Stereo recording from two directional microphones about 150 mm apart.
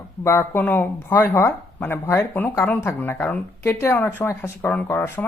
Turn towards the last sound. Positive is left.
turn(degrees=10)  # may be behind; listen again after turning